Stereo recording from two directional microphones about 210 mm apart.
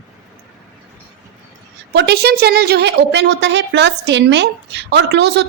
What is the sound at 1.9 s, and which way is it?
A woman's voice, 50° right (ahead or behind).